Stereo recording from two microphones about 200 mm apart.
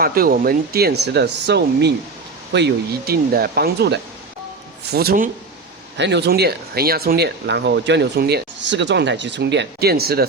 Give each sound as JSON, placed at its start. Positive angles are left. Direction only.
{"t": 0.0, "sound": "speech", "side_deg": -45}
{"t": 6.0, "sound": "speech", "side_deg": -60}